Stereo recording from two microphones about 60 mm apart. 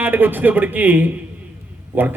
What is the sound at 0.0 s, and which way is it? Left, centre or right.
A man's voice, right.